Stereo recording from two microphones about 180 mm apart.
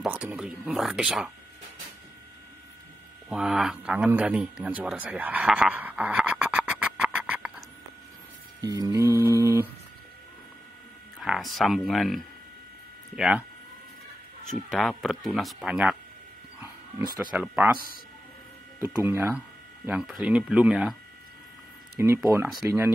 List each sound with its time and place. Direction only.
0.0 s speech: 5° right (ahead or behind)
3.3 s a man's voice: 5° right (ahead or behind)
8.5 s a sound: 20° right (ahead or behind)
11.1 s a sound: 5° right (ahead or behind)
11.5 s speech: centre (ahead or behind)
14.7 s speech: centre (ahead or behind)
17.2 s speech: 5° right (ahead or behind)
18.9 s speech: 15° right (ahead or behind)
22.0 s speech: 15° right (ahead or behind)